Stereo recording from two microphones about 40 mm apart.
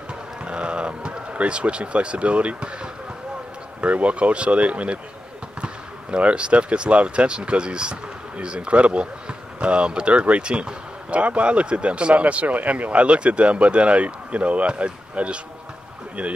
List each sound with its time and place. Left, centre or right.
0.5 s speech: right